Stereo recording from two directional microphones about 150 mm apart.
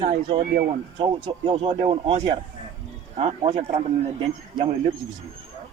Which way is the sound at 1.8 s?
45° right (ahead or behind).